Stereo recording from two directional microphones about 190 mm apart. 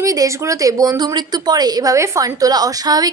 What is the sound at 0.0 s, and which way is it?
A woman's voice, 15° right (ahead or behind).